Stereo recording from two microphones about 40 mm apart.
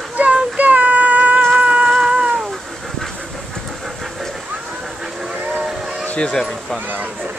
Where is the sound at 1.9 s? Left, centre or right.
Centre.